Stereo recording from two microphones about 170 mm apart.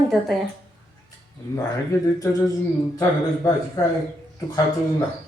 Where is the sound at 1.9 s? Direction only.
20° left (ahead or behind).